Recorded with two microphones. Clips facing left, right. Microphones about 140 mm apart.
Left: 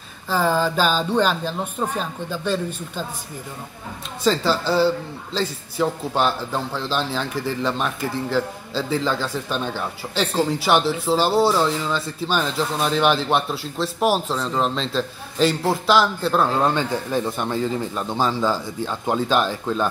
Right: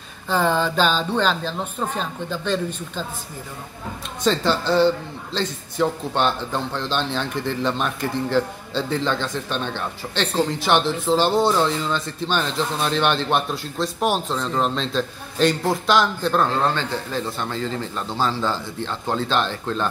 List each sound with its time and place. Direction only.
0.3 s speech: 5° left (ahead or behind)
4.2 s a man's voice: centre (ahead or behind)